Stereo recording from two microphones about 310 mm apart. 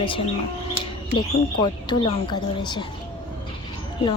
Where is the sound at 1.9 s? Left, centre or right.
Centre.